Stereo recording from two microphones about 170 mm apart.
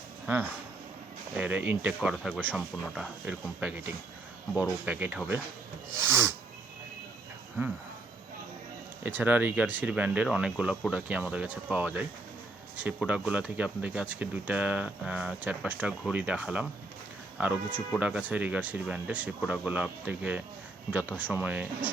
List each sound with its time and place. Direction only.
0.3 s speech: 10° right (ahead or behind); by 2.6 s 5° left (ahead or behind)
2.6 s speech: 5° right (ahead or behind)
9.0 s speech: 10° right (ahead or behind)